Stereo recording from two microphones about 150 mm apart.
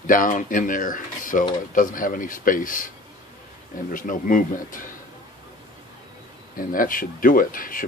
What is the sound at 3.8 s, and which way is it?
Speech, 65° left (ahead or behind).